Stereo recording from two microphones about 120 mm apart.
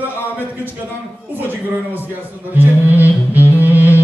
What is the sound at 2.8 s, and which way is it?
Music, 15° right (ahead or behind).